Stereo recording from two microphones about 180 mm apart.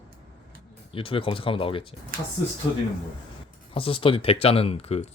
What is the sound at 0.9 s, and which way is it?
Speech, 30° left (ahead or behind).